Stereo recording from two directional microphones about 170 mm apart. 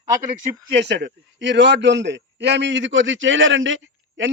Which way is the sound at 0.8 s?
90° right.